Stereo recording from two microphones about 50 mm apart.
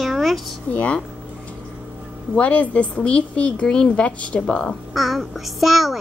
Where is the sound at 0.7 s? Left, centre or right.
Left.